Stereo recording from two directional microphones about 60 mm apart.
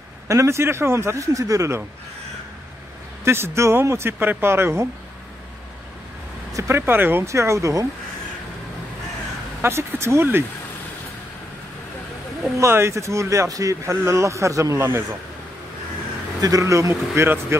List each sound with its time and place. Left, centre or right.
0.3 s speech: right
3.3 s speech: right
6.7 s speech: right
7.2 s speech: right
9.6 s speech: right
12.5 s speech: right
13.5 s speech: right
14.8 s speech: right
16.3 s speech: right
16.9 s speech: right